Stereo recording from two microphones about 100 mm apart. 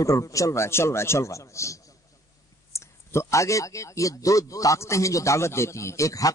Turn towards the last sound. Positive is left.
turn(degrees=35)  # may be behind; listen again after turning